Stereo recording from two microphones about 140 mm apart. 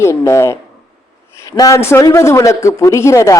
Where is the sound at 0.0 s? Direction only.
20° left (ahead or behind).